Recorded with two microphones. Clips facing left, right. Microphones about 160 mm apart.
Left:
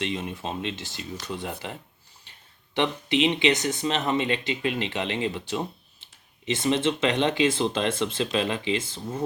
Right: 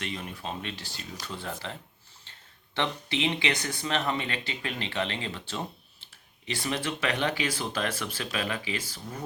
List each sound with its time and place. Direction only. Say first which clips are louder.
0.0 s speech: left 6 dB; 20° left (ahead or behind)
2.3 s a sound: even; 15° left (ahead or behind)
2.7 s speech: left 6 dB; 20° left (ahead or behind)